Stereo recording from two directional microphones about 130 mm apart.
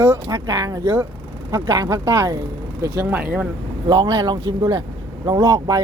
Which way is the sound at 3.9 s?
30° right (ahead or behind).